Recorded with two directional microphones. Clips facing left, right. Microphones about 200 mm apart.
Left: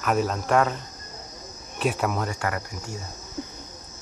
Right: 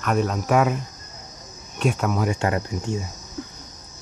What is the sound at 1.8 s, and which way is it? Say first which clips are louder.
Cricket: right 2 dB; 5° left (ahead or behind).